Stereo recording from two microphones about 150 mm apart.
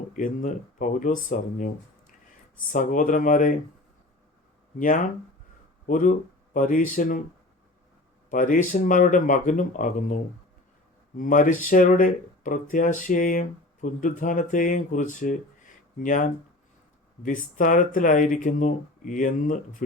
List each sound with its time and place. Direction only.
0.2 s speech: 60° left (ahead or behind)
2.7 s speech: 60° left (ahead or behind)
4.8 s speech: 65° left (ahead or behind)
8.3 s speech: 60° left (ahead or behind)
11.2 s speech: 60° left (ahead or behind)